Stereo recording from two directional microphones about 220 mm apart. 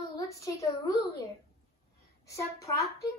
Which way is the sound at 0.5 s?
15° left (ahead or behind).